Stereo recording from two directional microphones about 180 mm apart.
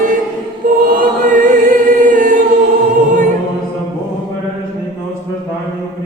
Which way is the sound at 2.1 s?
50° right (ahead or behind).